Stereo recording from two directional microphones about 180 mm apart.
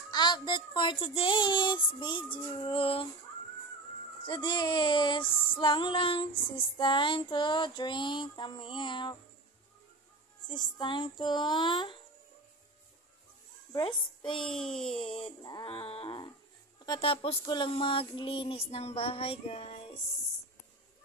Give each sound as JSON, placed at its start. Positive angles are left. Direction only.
{"t": 0.1, "sound": "female singing", "side_deg": 25}
{"t": 4.3, "sound": "female singing", "side_deg": 25}
{"t": 10.5, "sound": "female singing", "side_deg": 25}
{"t": 13.7, "sound": "a child's voice", "side_deg": 25}
{"t": 14.4, "sound": "a sound", "side_deg": 0}
{"t": 15.2, "sound": "a sound", "side_deg": 25}